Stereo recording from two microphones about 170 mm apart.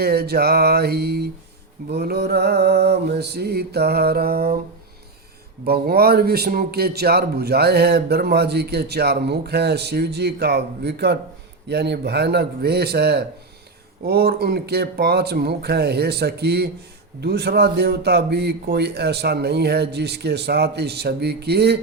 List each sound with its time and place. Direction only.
0.0 s a man's voice: 65° right (ahead or behind)
5.6 s a man's voice: 65° right (ahead or behind)